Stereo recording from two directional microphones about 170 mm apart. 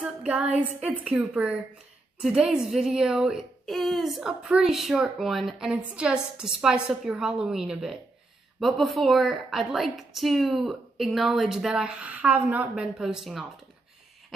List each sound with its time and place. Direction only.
0.0 s a woman's voice: 5° right (ahead or behind)